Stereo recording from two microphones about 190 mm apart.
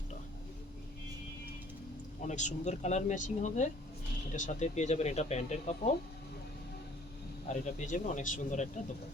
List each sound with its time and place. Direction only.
2.2 s speech: 40° left (ahead or behind)
7.4 s speech: 40° left (ahead or behind)